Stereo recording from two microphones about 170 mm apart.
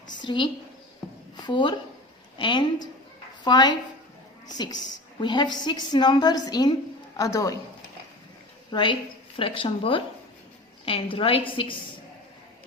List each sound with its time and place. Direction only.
0.1 s a sound: 25° left (ahead or behind)
1.4 s a woman's voice: 25° left (ahead or behind)
8.7 s a woman's voice: 30° left (ahead or behind)